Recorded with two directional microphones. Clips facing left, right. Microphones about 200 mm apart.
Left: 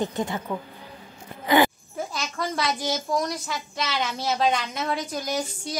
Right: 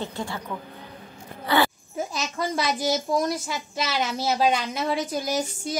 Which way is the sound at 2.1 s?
20° right (ahead or behind).